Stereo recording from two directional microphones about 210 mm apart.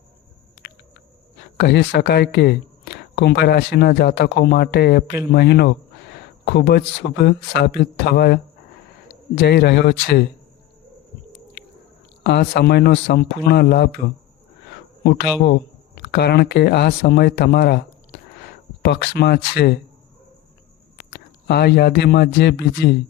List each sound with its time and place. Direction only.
1.5 s speech: 55° left (ahead or behind)
12.2 s speech: 50° left (ahead or behind)
15.0 s speech: 50° left (ahead or behind)
18.8 s speech: 55° left (ahead or behind)
21.0 s speech: 50° left (ahead or behind)